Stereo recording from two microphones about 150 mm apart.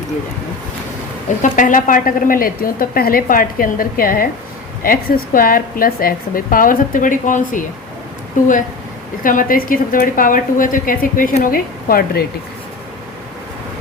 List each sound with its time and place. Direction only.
1.4 s a woman's voice: 60° left (ahead or behind); by 12.2 s 80° left